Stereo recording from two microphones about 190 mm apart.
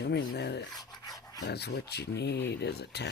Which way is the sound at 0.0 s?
60° left (ahead or behind).